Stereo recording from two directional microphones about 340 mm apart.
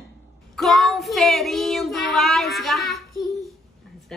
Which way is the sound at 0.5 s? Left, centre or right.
Centre.